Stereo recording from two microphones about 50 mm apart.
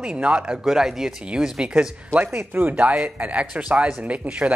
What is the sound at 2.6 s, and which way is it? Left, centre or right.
Speech, right.